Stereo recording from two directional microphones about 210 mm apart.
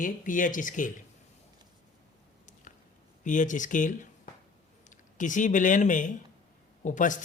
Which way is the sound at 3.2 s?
35° left (ahead or behind).